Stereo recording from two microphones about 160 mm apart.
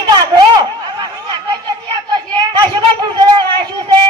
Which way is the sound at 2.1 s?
30° right (ahead or behind).